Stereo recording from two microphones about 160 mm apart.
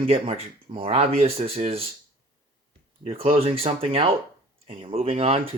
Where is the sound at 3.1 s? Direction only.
40° right (ahead or behind).